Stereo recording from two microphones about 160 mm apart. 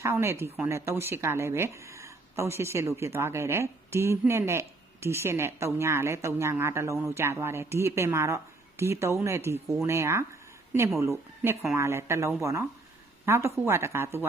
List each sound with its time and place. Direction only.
0.0 s speech: 15° right (ahead or behind)